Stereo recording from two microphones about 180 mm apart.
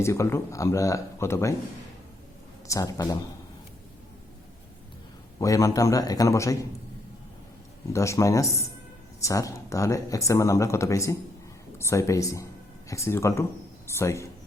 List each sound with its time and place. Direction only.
0.0 s speech: 15° left (ahead or behind)
2.6 s speech: 20° left (ahead or behind)
5.4 s speech: 15° left (ahead or behind)
7.9 s speech: 15° left (ahead or behind)